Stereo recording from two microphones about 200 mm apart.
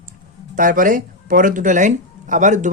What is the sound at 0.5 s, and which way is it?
Speech, 40° right (ahead or behind).